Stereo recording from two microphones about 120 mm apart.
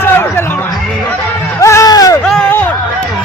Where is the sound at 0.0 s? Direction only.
20° left (ahead or behind).